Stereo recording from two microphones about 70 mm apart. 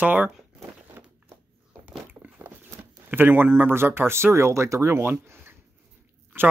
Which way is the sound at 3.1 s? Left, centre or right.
Right.